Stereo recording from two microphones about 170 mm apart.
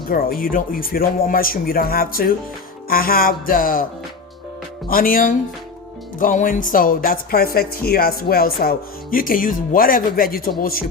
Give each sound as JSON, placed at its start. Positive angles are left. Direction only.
{"t": 0.1, "sound": "speech", "side_deg": 60}
{"t": 4.9, "sound": "speech", "side_deg": 55}